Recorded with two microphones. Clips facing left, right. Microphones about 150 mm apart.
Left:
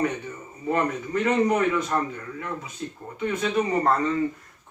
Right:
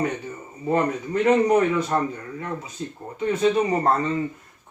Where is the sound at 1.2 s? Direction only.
30° right (ahead or behind).